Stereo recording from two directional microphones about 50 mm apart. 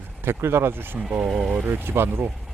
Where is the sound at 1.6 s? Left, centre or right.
Right.